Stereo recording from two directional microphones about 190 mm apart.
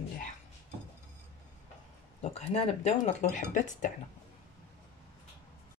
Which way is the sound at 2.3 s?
35° left (ahead or behind).